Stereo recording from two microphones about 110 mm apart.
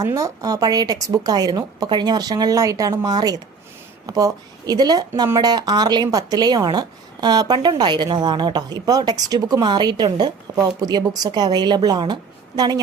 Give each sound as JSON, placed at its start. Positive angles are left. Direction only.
{"t": 0.0, "sound": "speech", "side_deg": -30}